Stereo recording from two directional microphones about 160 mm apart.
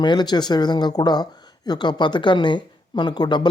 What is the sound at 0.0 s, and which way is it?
Speech, 30° left (ahead or behind).